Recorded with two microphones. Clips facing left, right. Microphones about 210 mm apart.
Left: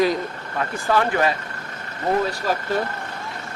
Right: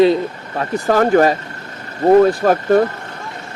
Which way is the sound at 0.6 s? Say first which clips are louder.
Right 6 dB; 40° right (ahead or behind).